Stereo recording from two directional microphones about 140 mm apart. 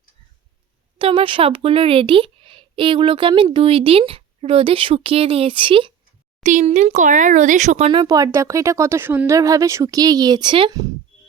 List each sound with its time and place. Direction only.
0.9 s a woman's voice: 40° right (ahead or behind)
6.4 s speech: 60° right (ahead or behind)
7.9 s speech: 30° right (ahead or behind)